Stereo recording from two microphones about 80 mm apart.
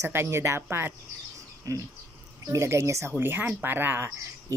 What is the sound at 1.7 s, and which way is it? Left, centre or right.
Speech, right.